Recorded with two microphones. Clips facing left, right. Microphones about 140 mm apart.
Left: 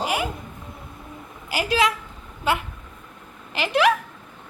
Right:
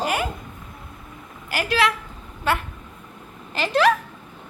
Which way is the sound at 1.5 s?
20° left (ahead or behind).